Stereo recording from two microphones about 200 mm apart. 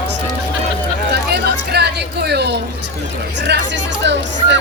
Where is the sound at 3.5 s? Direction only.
55° right (ahead or behind).